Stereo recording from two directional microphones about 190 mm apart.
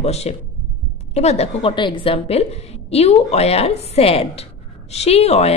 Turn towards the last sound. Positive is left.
turn(degrees=35)  # may be behind; listen again after turning